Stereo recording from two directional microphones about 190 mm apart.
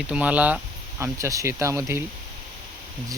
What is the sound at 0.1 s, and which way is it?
Speech, 5° right (ahead or behind).